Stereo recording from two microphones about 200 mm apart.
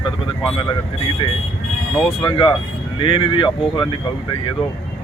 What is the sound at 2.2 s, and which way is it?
Speech, 25° left (ahead or behind).